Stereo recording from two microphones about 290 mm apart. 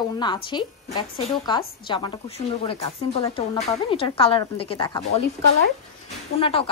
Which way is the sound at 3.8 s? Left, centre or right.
Centre.